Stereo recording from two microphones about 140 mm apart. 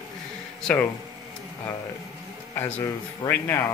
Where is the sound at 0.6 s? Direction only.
5° left (ahead or behind).